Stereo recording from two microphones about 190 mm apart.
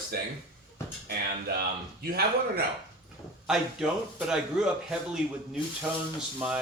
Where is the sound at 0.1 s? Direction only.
55° right (ahead or behind).